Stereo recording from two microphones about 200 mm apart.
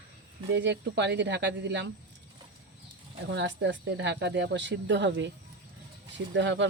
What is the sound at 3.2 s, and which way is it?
Speech, 60° right (ahead or behind).